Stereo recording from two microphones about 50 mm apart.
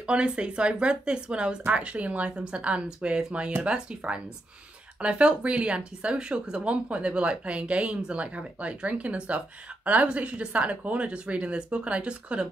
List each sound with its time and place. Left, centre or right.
0.0 s speech: right
2.3 s speech: centre